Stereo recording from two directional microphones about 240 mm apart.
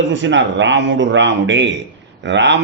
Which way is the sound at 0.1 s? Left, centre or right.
Right.